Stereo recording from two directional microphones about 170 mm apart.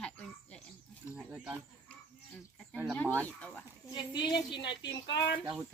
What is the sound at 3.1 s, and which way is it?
Speech, 10° left (ahead or behind).